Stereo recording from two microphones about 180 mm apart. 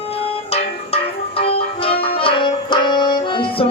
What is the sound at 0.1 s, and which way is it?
Music, 35° left (ahead or behind).